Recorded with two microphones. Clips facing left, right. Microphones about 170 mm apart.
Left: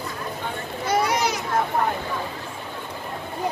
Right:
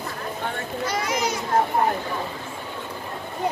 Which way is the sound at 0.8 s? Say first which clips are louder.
Left 4 dB; 60° left (ahead or behind).